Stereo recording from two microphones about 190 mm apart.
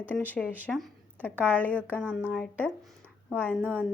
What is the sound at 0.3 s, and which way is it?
Speech, 10° left (ahead or behind).